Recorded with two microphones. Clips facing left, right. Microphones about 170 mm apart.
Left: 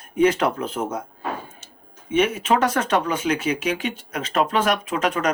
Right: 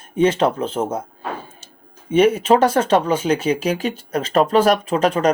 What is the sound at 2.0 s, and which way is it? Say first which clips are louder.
Speech: right 6 dB; 30° right (ahead or behind).